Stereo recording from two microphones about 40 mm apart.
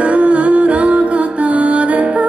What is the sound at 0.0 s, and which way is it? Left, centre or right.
Music, right.